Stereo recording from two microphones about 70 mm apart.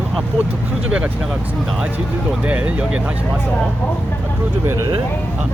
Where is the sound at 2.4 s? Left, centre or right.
Right.